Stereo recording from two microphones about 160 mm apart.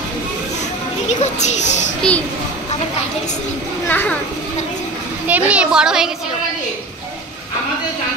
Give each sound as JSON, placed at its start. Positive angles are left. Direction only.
{"t": 1.2, "sound": "speech", "side_deg": 45}
{"t": 2.0, "sound": "a child's voice", "side_deg": 10}
{"t": 3.8, "sound": "a child's voice", "side_deg": 10}
{"t": 5.2, "sound": "a child's voice", "side_deg": -10}